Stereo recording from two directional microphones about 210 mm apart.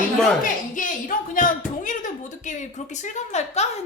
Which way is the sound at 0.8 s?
40° left (ahead or behind).